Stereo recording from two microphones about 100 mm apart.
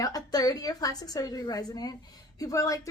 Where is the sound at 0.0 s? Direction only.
40° left (ahead or behind).